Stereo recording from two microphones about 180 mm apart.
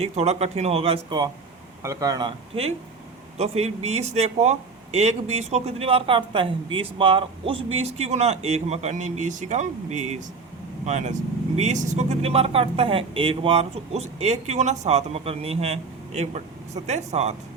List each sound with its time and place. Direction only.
0.0 s speech: 35° right (ahead or behind)
1.8 s speech: 15° right (ahead or behind); by 17.3 s 40° right (ahead or behind)